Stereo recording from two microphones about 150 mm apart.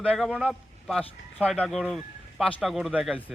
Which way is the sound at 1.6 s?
10° left (ahead or behind).